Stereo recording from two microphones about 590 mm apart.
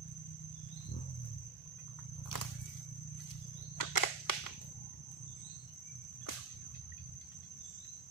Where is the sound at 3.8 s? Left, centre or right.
Left.